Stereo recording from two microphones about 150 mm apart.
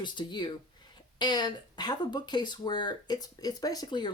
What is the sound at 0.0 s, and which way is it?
Speech, 30° left (ahead or behind).